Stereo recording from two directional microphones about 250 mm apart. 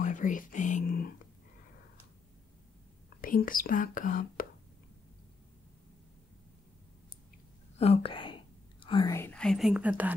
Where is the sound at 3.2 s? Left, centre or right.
Left.